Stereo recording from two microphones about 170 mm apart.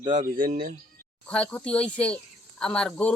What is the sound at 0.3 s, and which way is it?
Speech, 55° right (ahead or behind).